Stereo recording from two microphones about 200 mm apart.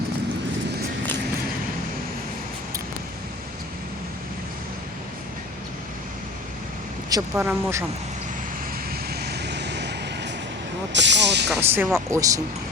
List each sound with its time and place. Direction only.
7.3 s speech: 10° right (ahead or behind)
9.0 s vehicle: 55° right (ahead or behind)
10.9 s speech: 60° right (ahead or behind)
11.5 s speech: 10° right (ahead or behind)
12.1 s speech: 15° right (ahead or behind)